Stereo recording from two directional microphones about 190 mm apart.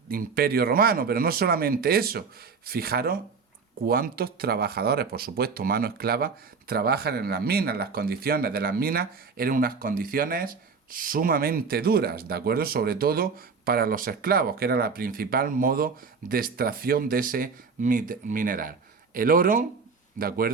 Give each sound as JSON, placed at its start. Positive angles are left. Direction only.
{"t": 0.1, "sound": "speech", "side_deg": -50}